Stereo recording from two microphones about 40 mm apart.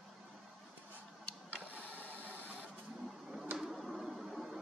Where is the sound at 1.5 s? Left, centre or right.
Right.